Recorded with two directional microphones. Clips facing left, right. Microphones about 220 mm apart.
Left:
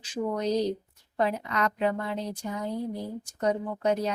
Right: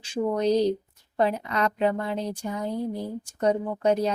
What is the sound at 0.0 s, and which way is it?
Speech, 30° right (ahead or behind).